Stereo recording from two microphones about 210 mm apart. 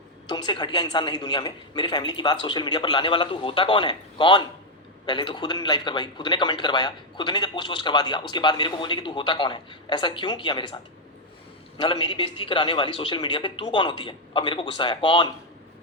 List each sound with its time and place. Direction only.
0.3 s a woman's voice: 20° left (ahead or behind)
11.8 s a woman's voice: 25° left (ahead or behind)